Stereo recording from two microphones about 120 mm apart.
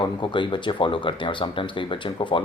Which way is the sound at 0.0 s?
40° left (ahead or behind).